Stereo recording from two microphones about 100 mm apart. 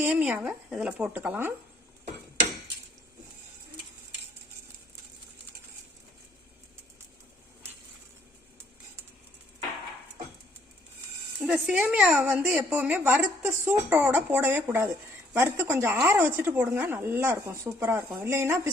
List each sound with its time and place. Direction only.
0.0 s speech: 10° right (ahead or behind)
11.6 s speech: 10° right (ahead or behind)